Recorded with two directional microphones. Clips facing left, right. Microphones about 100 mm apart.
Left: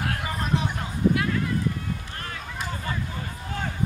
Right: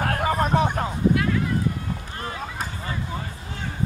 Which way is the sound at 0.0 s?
50° right (ahead or behind).